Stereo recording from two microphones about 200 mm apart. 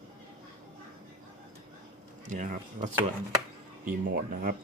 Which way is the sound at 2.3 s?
40° right (ahead or behind).